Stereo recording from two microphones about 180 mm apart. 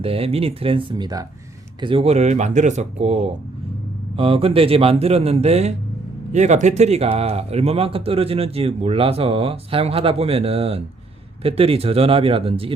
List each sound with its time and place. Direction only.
0.0 s speech: 30° right (ahead or behind)